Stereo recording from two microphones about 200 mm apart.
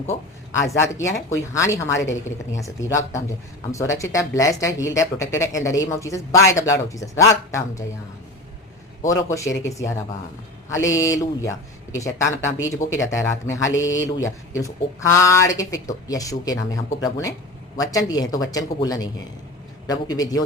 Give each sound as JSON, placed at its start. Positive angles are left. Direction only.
{"t": 0.1, "sound": "speech", "side_deg": 15}
{"t": 9.0, "sound": "speech", "side_deg": 15}